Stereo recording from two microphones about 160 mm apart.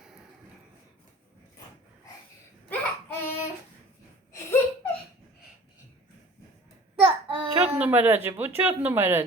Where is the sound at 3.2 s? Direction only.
15° left (ahead or behind).